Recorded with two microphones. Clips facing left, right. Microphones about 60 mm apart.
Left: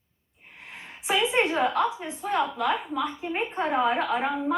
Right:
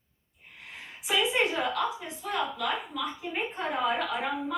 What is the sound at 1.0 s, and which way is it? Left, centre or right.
A woman's voice, left.